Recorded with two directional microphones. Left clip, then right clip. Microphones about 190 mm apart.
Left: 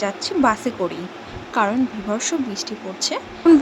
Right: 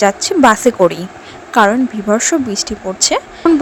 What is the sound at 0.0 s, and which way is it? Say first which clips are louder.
A woman's voice: right 9 dB; 45° right (ahead or behind).